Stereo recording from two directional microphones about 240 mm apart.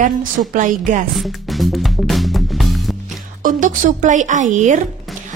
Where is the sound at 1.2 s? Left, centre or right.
Centre.